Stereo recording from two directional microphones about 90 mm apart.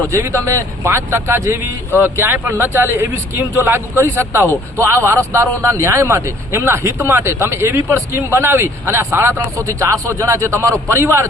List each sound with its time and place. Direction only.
0.1 s speech: 30° right (ahead or behind)